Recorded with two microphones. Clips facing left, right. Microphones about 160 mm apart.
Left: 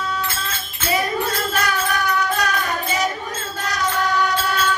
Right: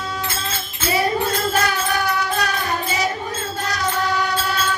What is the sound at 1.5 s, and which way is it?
Music, 30° right (ahead or behind).